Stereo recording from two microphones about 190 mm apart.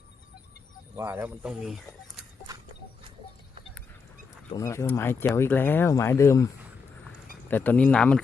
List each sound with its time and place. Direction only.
0.9 s speech: 10° right (ahead or behind)
2.5 s a sound: 20° right (ahead or behind)
4.5 s speech: 15° left (ahead or behind)